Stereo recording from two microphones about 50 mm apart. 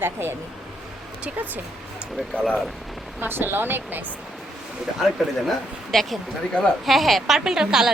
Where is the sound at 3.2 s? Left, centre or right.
Right.